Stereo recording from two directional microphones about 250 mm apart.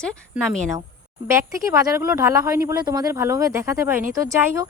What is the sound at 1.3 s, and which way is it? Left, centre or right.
Speech, centre.